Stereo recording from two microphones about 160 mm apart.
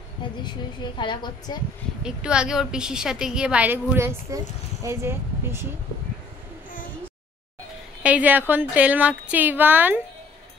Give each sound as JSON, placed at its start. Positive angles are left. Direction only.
{"t": 0.4, "sound": "a woman's voice", "side_deg": 30}
{"t": 2.0, "sound": "a woman's voice", "side_deg": -5}
{"t": 8.0, "sound": "a woman's voice", "side_deg": -10}